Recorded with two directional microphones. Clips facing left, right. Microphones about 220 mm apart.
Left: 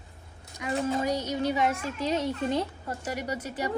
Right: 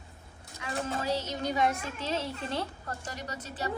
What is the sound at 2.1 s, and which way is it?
Speech, 15° left (ahead or behind).